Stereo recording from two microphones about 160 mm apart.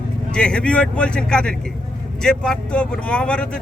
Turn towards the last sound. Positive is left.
turn(degrees=5)  # may be behind; listen again after turning